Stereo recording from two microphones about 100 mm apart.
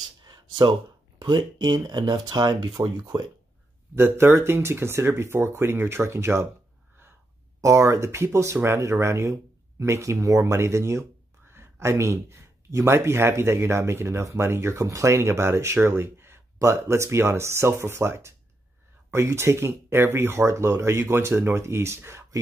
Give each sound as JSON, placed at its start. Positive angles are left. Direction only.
{"t": 0.2, "sound": "a sound", "side_deg": -45}
{"t": 1.2, "sound": "speech", "side_deg": -45}
{"t": 3.9, "sound": "speech", "side_deg": -25}
{"t": 7.6, "sound": "speech", "side_deg": -30}